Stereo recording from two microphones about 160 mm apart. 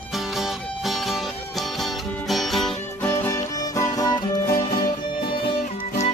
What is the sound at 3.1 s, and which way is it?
Music, 15° left (ahead or behind).